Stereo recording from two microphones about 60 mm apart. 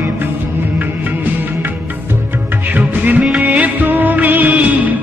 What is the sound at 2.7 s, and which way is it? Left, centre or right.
Music of bollywood, right.